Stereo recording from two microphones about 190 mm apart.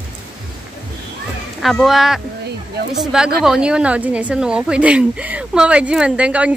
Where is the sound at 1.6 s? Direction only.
Centre (ahead or behind).